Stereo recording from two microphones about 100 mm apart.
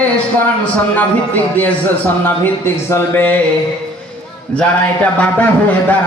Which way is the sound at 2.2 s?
25° left (ahead or behind).